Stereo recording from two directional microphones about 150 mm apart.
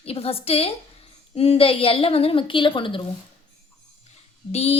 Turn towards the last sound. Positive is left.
turn(degrees=45)  # may be behind; listen again after turning